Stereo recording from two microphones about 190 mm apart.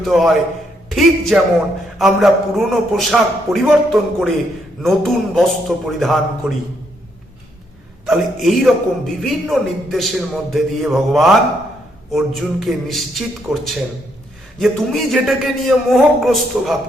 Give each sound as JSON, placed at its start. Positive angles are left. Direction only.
{"t": 0.0, "sound": "a man's voice", "side_deg": 0}
{"t": 8.0, "sound": "a man's voice", "side_deg": 0}
{"t": 14.6, "sound": "a man's voice", "side_deg": 0}